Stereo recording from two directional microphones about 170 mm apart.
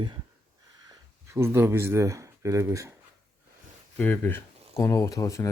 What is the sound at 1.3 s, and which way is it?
Speech, 15° right (ahead or behind).